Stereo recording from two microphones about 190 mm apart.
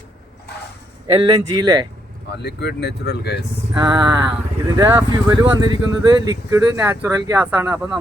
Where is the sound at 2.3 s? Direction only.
60° left (ahead or behind).